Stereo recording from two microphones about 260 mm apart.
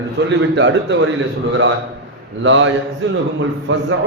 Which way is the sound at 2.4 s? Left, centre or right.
Right.